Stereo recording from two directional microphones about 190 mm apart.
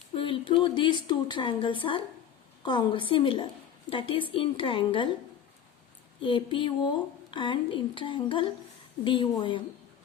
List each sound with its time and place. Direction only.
0.1 s a woman's voice: 25° left (ahead or behind)
6.2 s a woman's voice: 25° left (ahead or behind)